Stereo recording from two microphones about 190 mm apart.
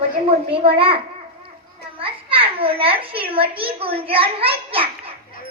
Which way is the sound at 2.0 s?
30° right (ahead or behind).